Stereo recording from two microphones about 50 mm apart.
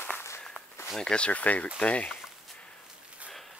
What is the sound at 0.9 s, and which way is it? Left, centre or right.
Speech, centre.